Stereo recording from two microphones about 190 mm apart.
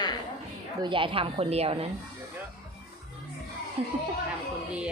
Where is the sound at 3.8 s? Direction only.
30° right (ahead or behind).